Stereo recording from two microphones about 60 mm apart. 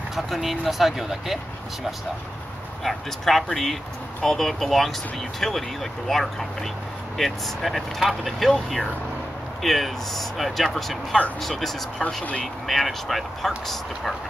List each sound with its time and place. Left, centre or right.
0.1 s speech: centre
2.8 s speech: centre
12.0 s speech: centre
12.6 s speech: centre